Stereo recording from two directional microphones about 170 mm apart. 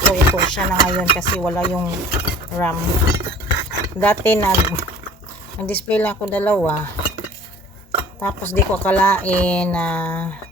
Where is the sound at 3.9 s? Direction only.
10° left (ahead or behind).